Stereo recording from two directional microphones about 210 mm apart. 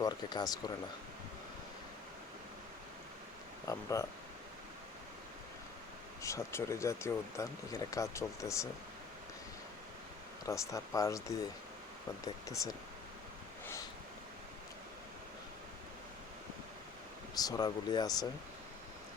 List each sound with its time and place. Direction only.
0.0 s speech: 20° left (ahead or behind)
3.7 s speech: 15° left (ahead or behind)
6.2 s speech: 15° left (ahead or behind)
10.4 s speech: 15° left (ahead or behind)
17.3 s speech: 20° left (ahead or behind)